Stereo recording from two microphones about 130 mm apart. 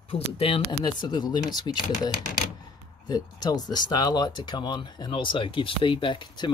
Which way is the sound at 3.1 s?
30° left (ahead or behind).